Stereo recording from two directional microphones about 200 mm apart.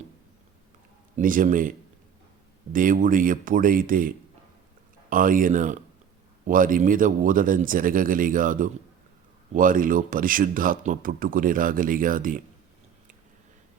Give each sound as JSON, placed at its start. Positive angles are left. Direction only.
{"t": 1.1, "sound": "speech", "side_deg": -45}
{"t": 2.7, "sound": "speech", "side_deg": -45}